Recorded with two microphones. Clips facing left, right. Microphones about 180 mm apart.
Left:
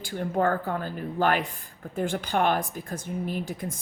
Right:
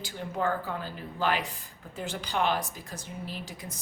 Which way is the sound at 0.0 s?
50° left (ahead or behind).